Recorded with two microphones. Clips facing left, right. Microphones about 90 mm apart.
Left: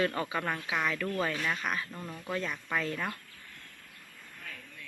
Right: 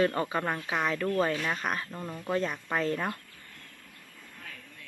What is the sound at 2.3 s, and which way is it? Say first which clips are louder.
Speech: right 3 dB; 35° right (ahead or behind).